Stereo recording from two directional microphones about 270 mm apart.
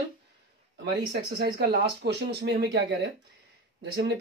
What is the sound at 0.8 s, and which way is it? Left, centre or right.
Speech, right.